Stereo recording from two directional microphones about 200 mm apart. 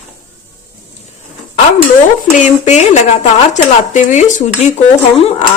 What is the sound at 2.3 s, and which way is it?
Speech, 35° left (ahead or behind).